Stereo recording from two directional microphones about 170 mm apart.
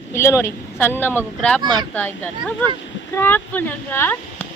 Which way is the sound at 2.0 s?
10° left (ahead or behind).